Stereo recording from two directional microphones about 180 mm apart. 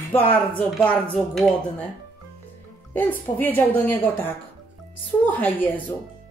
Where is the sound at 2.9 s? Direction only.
10° left (ahead or behind).